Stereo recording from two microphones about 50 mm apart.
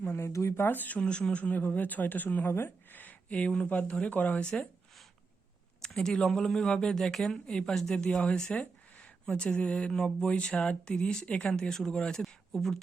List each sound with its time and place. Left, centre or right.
0.1 s speech: left
0.6 s speech: left
0.9 s speech: centre; by 2.5 s left
2.5 s speech: left
2.9 s a sound: left
3.7 s speech: left
5.8 s speech: centre
7.9 s speech: centre